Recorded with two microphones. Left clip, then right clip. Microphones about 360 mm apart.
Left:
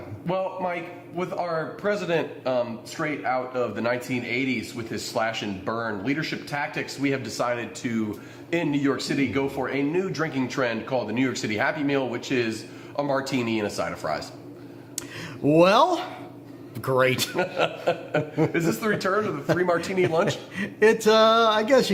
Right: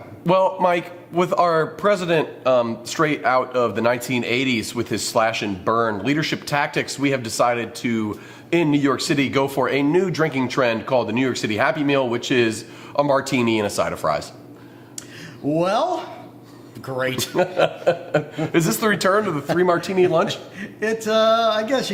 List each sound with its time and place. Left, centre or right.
0.3 s a man's voice: right
1.8 s speech: right
3.0 s speech: right
15.5 s speech: left
17.3 s a man's voice: right
19.5 s speech: right
20.6 s speech: left